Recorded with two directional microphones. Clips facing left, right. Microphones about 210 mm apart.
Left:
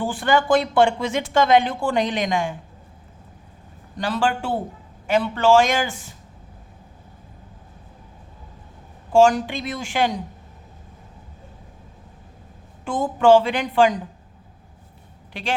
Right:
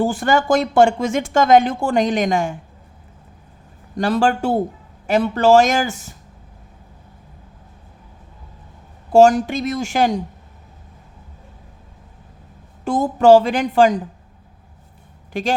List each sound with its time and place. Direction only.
0.0 s speech: 45° right (ahead or behind)
3.9 s a woman's voice: 45° right (ahead or behind)
9.1 s speech: 40° right (ahead or behind)
12.8 s a woman's voice: 40° right (ahead or behind)
15.3 s speech: 45° right (ahead or behind)